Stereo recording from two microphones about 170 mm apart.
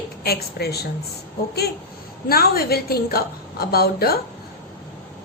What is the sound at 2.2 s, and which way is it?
A woman's voice, 60° left (ahead or behind).